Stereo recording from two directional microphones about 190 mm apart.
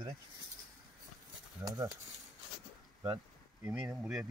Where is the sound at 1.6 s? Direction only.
20° right (ahead or behind).